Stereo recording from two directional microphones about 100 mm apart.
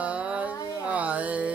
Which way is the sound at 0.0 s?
10° right (ahead or behind).